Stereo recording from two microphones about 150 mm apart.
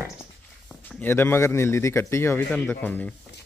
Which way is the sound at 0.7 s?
5° left (ahead or behind).